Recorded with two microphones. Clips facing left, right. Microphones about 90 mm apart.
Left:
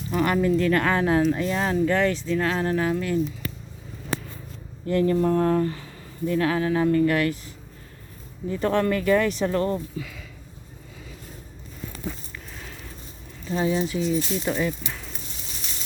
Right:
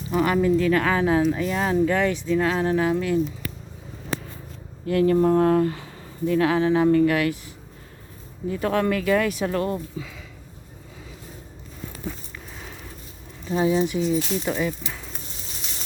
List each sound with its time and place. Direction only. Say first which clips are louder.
0.1 s speech: right 2 dB; 5° right (ahead or behind)
4.9 s speech: right 2 dB; 5° right (ahead or behind)
6.4 s speech: right 3 dB; 15° right (ahead or behind)
6.9 s speech: right 2 dB; 10° right (ahead or behind)
8.4 s speech: even; 5° right (ahead or behind)
10.0 s a sound: even; 20° right (ahead or behind)
12.5 s a sound: right 2 dB; 10° right (ahead or behind)
13.4 s speech: right 3 dB; 15° right (ahead or behind)
14.4 s speech: even; centre (ahead or behind)